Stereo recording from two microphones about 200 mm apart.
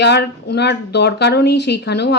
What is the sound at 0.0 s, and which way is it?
Speech, 55° left (ahead or behind).